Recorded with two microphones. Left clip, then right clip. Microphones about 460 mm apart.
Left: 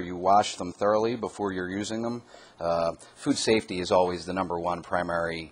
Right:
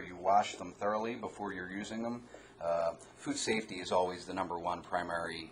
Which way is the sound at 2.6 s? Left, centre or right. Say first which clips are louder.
Left 7 dB; left.